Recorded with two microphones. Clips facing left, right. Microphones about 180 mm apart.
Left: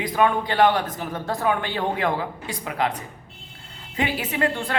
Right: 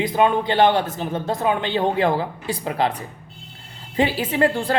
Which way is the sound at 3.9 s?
30° right (ahead or behind).